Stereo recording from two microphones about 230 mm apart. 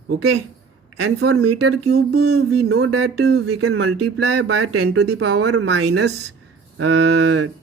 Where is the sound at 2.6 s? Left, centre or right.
Right.